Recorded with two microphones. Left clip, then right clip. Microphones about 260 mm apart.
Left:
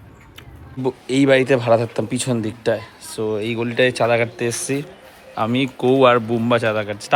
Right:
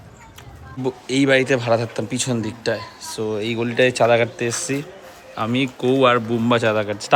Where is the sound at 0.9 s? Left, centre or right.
Centre.